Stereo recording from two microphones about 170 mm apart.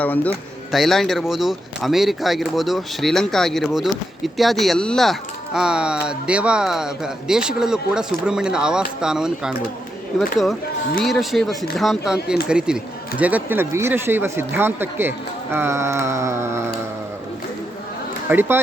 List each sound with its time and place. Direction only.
0.0 s speech: 10° left (ahead or behind)
11.0 s speech: centre (ahead or behind); by 16.7 s 15° right (ahead or behind)
18.3 s speech: 15° right (ahead or behind)